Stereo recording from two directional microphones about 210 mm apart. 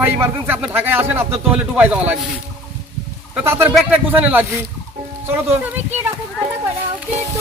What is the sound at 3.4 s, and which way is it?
A man's voice, 10° right (ahead or behind).